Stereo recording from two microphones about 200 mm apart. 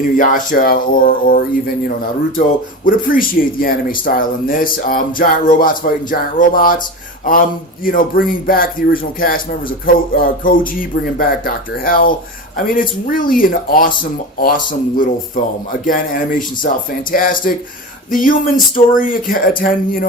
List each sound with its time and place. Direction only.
0.2 s speech: 40° left (ahead or behind)
2.8 s speech: 45° left (ahead or behind)
7.9 s speech: 45° left (ahead or behind)